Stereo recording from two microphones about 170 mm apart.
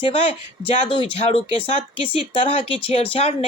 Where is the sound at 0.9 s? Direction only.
30° left (ahead or behind).